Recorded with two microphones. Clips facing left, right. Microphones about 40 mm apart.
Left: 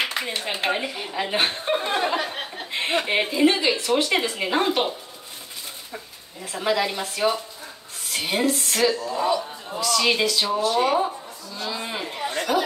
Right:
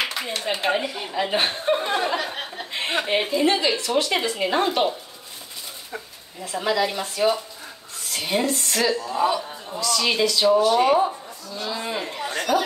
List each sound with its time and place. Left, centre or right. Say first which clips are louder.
0.0 s a sound: left 1 dB; centre
0.7 s speech: right 1 dB; centre
6.6 s speech: even; centre
8.9 s a woman's voice: right 1 dB; centre
9.7 s a woman's voice: left 2 dB; centre
10.6 s speech: right 3 dB; right
11.7 s a sound: right 3 dB; centre